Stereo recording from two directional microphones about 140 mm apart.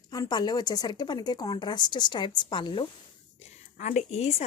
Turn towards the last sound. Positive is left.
turn(degrees=45)  # may be behind; listen again after turning